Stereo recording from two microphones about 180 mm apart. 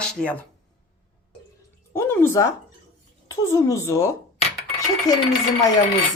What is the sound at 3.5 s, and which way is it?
Speech, 15° left (ahead or behind).